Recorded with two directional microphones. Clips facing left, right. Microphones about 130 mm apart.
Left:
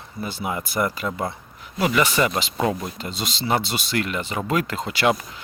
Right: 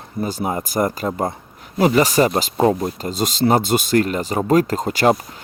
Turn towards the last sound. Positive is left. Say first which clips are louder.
# right 5 dB
turn(degrees=-40)  # may be behind; listen again after turning